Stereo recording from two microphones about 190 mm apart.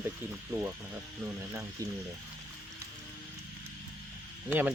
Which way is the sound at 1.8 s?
20° right (ahead or behind).